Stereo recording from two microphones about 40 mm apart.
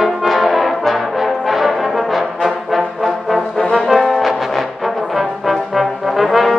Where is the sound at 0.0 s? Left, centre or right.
Centre.